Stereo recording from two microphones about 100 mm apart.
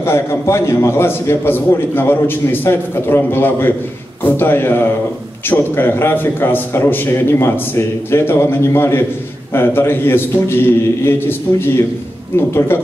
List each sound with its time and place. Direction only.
0.0 s a man's voice: 25° left (ahead or behind)